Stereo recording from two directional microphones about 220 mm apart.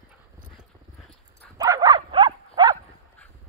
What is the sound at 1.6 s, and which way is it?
Bow-wow, 15° right (ahead or behind).